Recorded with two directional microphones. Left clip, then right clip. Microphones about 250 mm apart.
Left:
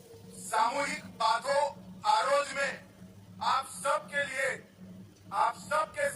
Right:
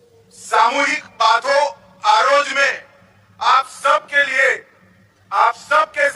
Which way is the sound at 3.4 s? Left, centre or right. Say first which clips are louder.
Right 15 dB; right.